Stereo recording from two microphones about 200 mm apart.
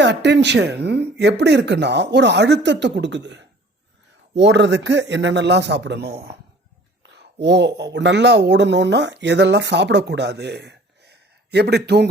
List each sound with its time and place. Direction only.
0.0 s speech: 60° right (ahead or behind)